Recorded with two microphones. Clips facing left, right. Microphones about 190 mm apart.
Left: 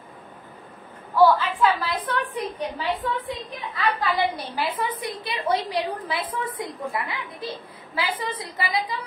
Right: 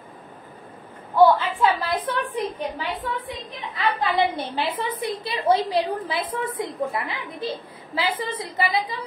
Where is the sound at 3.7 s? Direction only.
25° right (ahead or behind).